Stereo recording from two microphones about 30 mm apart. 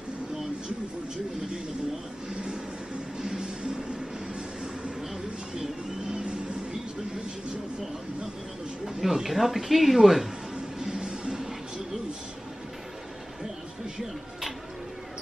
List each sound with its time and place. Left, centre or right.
2.3 s vehicle: right
3.2 s music: right
8.8 s speech: centre
10.8 s music: right